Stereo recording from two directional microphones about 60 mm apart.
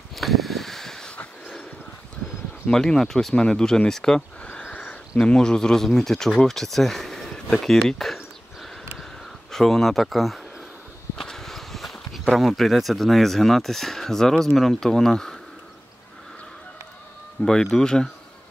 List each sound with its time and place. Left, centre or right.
0.1 s a sound: centre
2.7 s speech: centre
4.4 s a sound: left
5.2 s speech: centre
9.5 s speech: centre
17.4 s speech: centre